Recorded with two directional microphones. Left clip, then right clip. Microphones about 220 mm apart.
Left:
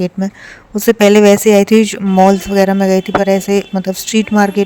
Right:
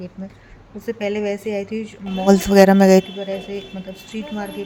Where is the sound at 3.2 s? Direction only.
50° left (ahead or behind).